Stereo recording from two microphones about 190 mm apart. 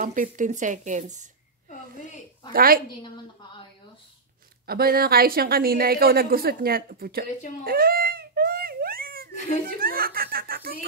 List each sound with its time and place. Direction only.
0.0 s speech: 40° right (ahead or behind)
2.5 s a woman's voice: 50° right (ahead or behind)
4.6 s a woman's voice: 50° right (ahead or behind)
7.6 s a sound: 50° right (ahead or behind)